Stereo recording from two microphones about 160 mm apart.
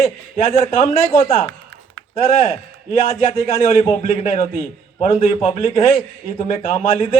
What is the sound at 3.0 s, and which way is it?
Speech, 35° left (ahead or behind).